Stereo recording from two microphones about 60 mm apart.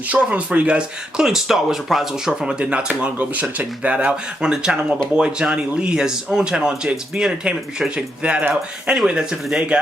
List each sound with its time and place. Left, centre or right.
0.1 s speech: right